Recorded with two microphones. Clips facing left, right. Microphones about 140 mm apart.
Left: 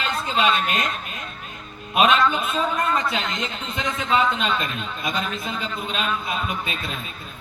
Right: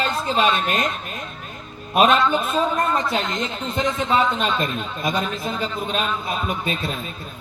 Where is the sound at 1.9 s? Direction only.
40° right (ahead or behind).